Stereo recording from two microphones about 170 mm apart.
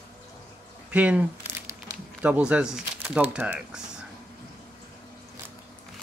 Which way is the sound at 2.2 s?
5° right (ahead or behind).